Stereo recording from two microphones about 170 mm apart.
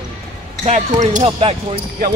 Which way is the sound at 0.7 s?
40° right (ahead or behind).